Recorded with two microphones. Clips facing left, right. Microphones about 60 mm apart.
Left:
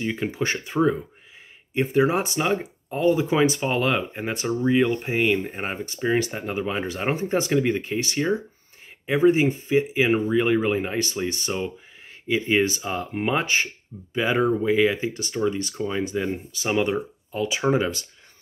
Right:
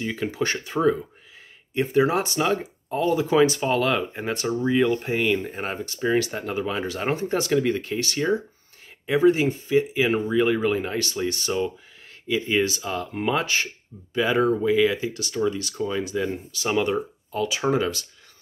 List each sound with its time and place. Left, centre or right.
0.0 s speech: centre
14.4 s speech: centre
14.7 s speech: left
16.6 s speech: centre